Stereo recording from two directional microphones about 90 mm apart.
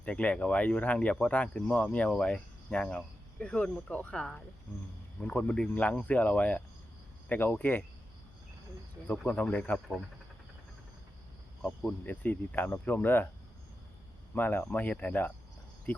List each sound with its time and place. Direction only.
0.0 s speech: 15° left (ahead or behind)
9.0 s speech: 15° left (ahead or behind)
11.6 s speech: 10° left (ahead or behind)
14.3 s speech: 20° left (ahead or behind)